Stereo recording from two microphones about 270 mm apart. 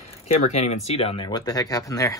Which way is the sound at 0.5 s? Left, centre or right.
Left.